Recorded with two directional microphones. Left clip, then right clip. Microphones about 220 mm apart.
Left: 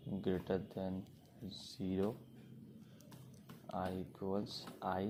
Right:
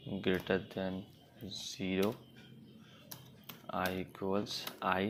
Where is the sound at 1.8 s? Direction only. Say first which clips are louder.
Right 5 dB; 40° right (ahead or behind).